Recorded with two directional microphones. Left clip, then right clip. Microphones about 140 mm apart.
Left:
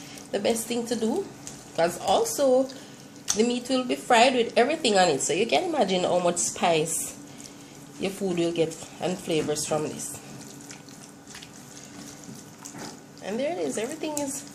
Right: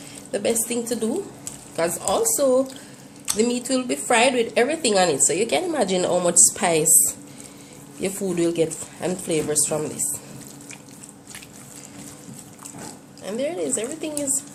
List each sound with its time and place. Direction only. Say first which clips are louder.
0.3 s a woman's voice: right 3 dB; 15° right (ahead or behind)
8.0 s a woman's voice: right 4 dB; 20° right (ahead or behind)
13.2 s a woman's voice: right 2 dB; 10° right (ahead or behind)